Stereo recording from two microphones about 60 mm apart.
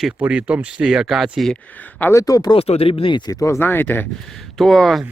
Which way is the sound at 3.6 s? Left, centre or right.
Left.